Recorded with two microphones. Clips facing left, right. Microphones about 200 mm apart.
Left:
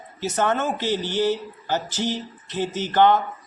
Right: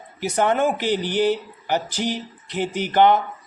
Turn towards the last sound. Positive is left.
turn(degrees=-15)  # may be behind; listen again after turning